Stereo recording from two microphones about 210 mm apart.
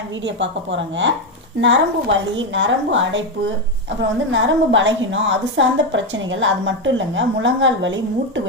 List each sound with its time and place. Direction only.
0.3 s a woman's voice: 60° right (ahead or behind)